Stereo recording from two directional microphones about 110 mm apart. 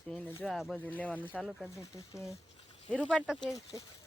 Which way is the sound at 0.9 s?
15° left (ahead or behind).